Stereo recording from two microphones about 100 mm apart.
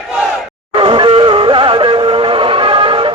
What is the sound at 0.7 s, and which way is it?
Music, 55° right (ahead or behind).